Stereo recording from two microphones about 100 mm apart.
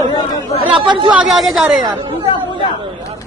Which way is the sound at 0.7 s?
55° right (ahead or behind).